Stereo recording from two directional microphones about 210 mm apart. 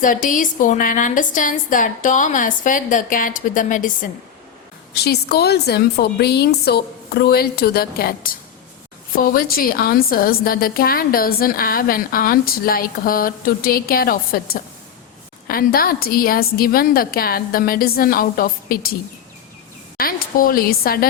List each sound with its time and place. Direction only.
0.0 s a woman's voice: 40° left (ahead or behind)
5.0 s a woman's voice: 50° left (ahead or behind)
15.4 s a woman's voice: 45° left (ahead or behind)
20.0 s a woman's voice: 45° left (ahead or behind)